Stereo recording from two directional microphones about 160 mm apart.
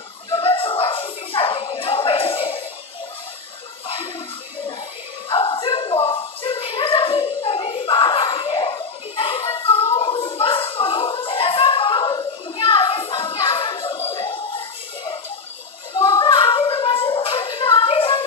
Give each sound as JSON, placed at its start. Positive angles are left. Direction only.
{"t": 0.3, "sound": "music", "side_deg": 35}
{"t": 5.3, "sound": "a sound", "side_deg": 30}
{"t": 14.1, "sound": "music", "side_deg": 35}
{"t": 15.9, "sound": "music", "side_deg": 25}